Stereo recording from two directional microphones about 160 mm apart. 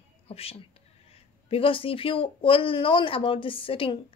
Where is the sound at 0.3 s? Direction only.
35° left (ahead or behind).